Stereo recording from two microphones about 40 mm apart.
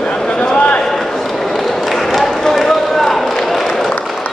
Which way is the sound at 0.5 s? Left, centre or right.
Left.